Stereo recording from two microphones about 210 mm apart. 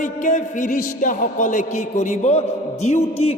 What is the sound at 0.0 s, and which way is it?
A man's voice, 35° left (ahead or behind).